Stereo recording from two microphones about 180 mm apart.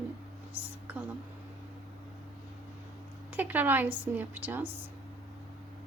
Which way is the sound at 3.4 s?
10° right (ahead or behind).